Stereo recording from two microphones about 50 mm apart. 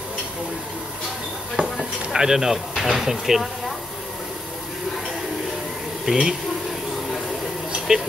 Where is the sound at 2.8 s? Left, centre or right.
Centre.